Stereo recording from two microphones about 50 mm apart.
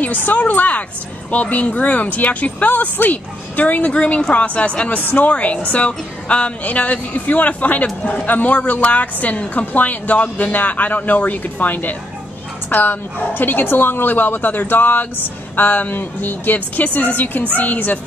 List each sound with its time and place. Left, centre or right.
0.0 s a woman's voice: left